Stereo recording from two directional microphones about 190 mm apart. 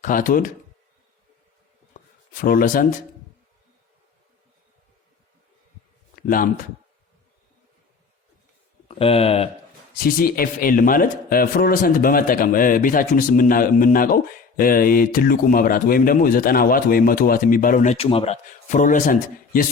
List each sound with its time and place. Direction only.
0.0 s a man's voice: 45° left (ahead or behind)
2.4 s a man's voice: 50° left (ahead or behind)
6.2 s a man's voice: 45° left (ahead or behind)
8.9 s speech: 30° left (ahead or behind)
10.2 s a man's voice: 50° left (ahead or behind)